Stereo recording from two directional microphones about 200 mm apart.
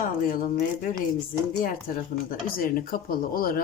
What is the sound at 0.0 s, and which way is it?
Speech, 40° left (ahead or behind).